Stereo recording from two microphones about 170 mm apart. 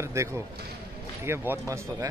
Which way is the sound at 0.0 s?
15° right (ahead or behind).